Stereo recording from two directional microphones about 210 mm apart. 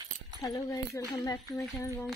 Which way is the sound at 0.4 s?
15° left (ahead or behind).